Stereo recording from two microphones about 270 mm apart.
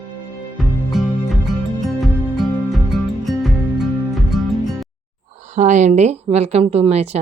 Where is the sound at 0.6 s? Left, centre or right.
Centre.